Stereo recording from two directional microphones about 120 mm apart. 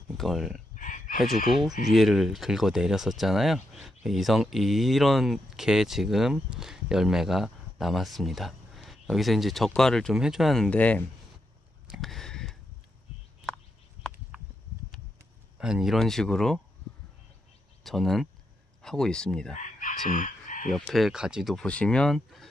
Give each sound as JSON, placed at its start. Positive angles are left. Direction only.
{"t": 0.1, "sound": "speech", "side_deg": 0}
{"t": 0.7, "sound": "chicken", "side_deg": 90}
{"t": 1.2, "sound": "speech", "side_deg": 0}
{"t": 11.9, "sound": "a sound", "side_deg": 0}
{"t": 15.5, "sound": "speech", "side_deg": -5}
{"t": 17.8, "sound": "speech", "side_deg": 0}
{"t": 19.5, "sound": "chicken", "side_deg": 90}
{"t": 20.9, "sound": "speech", "side_deg": -5}
{"t": 21.6, "sound": "speech", "side_deg": 10}